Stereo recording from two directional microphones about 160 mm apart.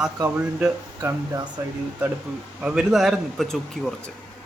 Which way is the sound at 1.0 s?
20° right (ahead or behind).